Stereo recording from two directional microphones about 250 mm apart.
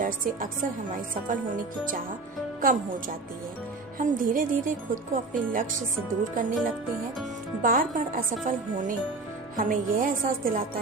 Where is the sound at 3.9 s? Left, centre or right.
Right.